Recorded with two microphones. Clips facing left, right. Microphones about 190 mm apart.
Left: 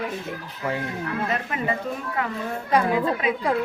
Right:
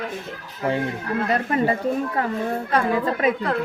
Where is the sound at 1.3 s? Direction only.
35° right (ahead or behind).